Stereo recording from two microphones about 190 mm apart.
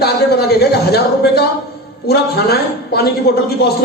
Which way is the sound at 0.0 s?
55° left (ahead or behind).